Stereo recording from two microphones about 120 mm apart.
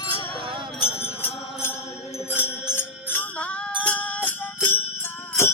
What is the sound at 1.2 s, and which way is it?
Music, 15° left (ahead or behind).